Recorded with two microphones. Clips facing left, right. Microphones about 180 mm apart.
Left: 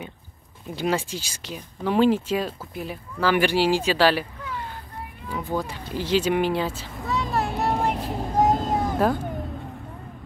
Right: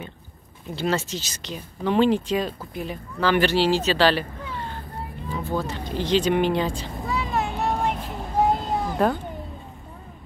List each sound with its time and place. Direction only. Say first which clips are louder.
0.7 s speech: even; 10° left (ahead or behind)
5.3 s speech: even; 15° left (ahead or behind)
7.0 s vehicle: left 2 dB; 10° right (ahead or behind)
7.2 s vehicle: left 1 dB; centre (ahead or behind)
8.0 s vehicle: left 1 dB; 40° left (ahead or behind)